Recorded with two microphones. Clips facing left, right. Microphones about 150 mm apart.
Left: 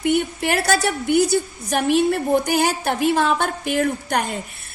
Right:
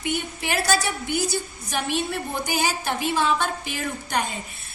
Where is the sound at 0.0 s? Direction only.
60° left (ahead or behind).